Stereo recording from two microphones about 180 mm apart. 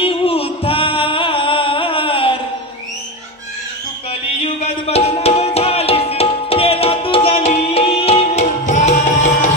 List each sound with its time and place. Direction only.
0.0 s music: 30° left (ahead or behind)
4.8 s music: 35° left (ahead or behind)